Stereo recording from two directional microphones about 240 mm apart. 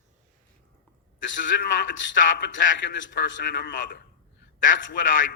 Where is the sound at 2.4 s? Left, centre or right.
Left.